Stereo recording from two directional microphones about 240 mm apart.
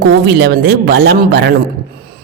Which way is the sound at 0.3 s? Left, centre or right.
Right.